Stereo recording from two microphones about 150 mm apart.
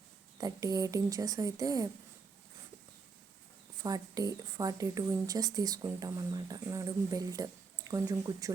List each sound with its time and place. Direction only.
0.3 s speech: 25° right (ahead or behind)
3.8 s speech: 25° right (ahead or behind)